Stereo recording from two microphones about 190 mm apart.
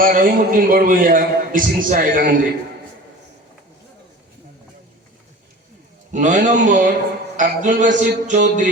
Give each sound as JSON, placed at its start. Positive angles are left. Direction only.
{"t": 0.0, "sound": "a man's voice", "side_deg": -50}
{"t": 6.1, "sound": "a man's voice", "side_deg": -40}
{"t": 7.3, "sound": "music", "side_deg": -45}